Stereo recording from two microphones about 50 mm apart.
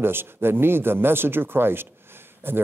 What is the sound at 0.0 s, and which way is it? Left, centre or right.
Speech, right.